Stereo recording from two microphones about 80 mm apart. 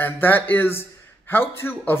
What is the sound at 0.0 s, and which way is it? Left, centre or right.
Speech, left.